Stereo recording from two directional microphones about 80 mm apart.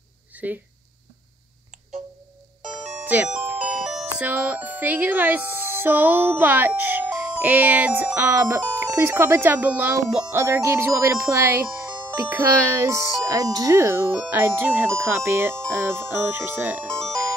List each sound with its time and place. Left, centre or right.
0.3 s a sound: right
2.9 s music: centre
4.3 s speech: centre
10.3 s speech: right
16.8 s music: centre